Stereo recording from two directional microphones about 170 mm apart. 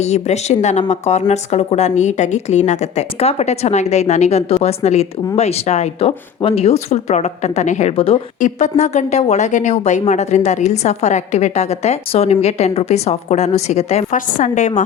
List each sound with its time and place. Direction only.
0.0 s speech: 40° left (ahead or behind)
8.4 s speech: 45° left (ahead or behind)